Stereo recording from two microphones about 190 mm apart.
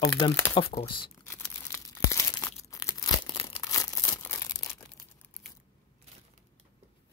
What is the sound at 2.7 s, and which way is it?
Crumpling, 15° left (ahead or behind).